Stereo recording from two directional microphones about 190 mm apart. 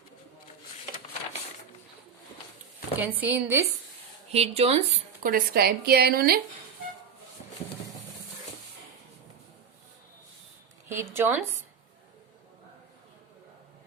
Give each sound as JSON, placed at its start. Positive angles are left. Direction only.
{"t": 3.0, "sound": "speech", "side_deg": -10}
{"t": 4.3, "sound": "speech", "side_deg": -30}
{"t": 5.2, "sound": "speech", "side_deg": -50}
{"t": 10.8, "sound": "a woman's voice", "side_deg": -10}